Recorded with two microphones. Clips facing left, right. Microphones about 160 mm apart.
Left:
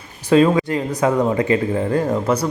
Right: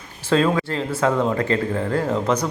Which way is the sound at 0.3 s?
15° left (ahead or behind).